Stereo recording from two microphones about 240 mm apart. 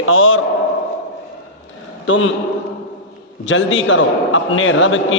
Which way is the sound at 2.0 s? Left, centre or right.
Left.